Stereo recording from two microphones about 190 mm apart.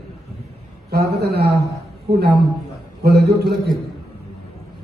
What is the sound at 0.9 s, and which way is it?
Speech, 60° right (ahead or behind).